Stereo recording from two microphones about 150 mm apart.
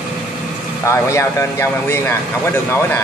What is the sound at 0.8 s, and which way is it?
Speech, 20° left (ahead or behind).